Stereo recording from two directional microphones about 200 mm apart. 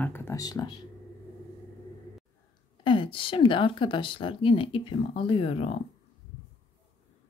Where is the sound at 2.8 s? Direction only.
25° left (ahead or behind).